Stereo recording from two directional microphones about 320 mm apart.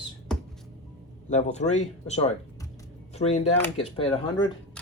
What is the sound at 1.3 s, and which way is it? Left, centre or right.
Speech, left.